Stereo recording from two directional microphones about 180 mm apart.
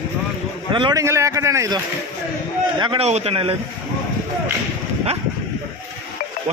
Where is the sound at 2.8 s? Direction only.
30° right (ahead or behind).